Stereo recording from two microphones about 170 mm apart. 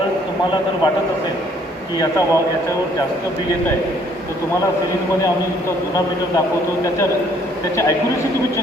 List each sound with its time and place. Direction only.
2.0 s a man's voice: 20° left (ahead or behind)